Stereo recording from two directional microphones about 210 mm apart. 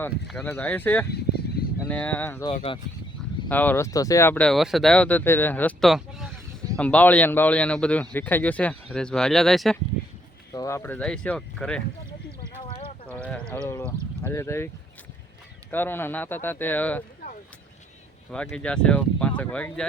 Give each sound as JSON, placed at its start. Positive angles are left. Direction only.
{"t": 0.3, "sound": "speech", "side_deg": 5}
{"t": 1.1, "sound": "a sound", "side_deg": 50}
{"t": 1.9, "sound": "speech", "side_deg": 5}
{"t": 2.5, "sound": "speech", "side_deg": 25}
{"t": 3.5, "sound": "speech", "side_deg": 10}
{"t": 10.5, "sound": "speech", "side_deg": 15}
{"t": 12.4, "sound": "a sound", "side_deg": 25}
{"t": 13.1, "sound": "sheep", "side_deg": 5}
{"t": 14.2, "sound": "speech", "side_deg": 10}
{"t": 15.7, "sound": "speech", "side_deg": 10}
{"t": 18.5, "sound": "speech", "side_deg": 5}